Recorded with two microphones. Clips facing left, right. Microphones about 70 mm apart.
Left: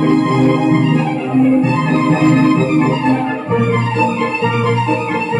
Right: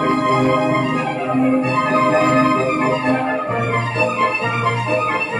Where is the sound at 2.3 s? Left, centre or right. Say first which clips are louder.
Left 3 dB; right.